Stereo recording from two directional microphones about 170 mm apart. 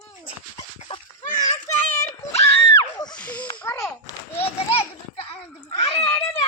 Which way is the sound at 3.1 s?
10° left (ahead or behind).